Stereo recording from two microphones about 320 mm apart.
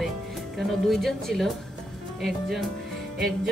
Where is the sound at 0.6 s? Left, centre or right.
Centre.